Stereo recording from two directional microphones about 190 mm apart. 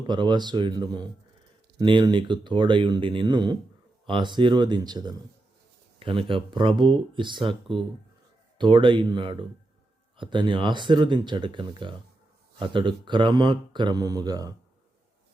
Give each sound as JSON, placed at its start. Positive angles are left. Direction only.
{"t": 0.1, "sound": "speech", "side_deg": -25}
{"t": 8.5, "sound": "speech", "side_deg": -25}